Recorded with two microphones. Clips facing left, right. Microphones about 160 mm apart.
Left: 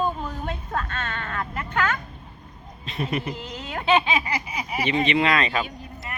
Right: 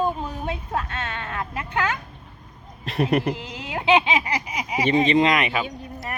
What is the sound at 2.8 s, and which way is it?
Speech, 65° right (ahead or behind).